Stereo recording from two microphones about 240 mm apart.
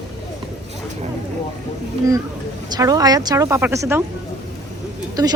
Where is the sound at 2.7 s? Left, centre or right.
Centre.